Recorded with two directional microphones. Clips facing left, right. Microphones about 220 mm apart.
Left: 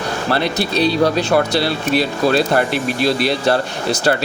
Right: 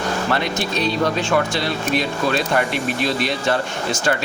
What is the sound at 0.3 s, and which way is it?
Speech, 35° left (ahead or behind).